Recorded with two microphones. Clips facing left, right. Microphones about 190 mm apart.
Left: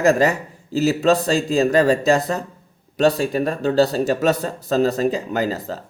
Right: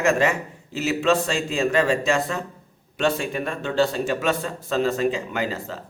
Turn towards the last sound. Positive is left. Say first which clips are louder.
# left 5 dB
turn(degrees=40)  # may be behind; listen again after turning